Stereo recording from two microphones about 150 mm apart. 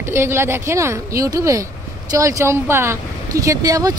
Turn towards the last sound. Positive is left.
turn(degrees=-25)  # may be behind; listen again after turning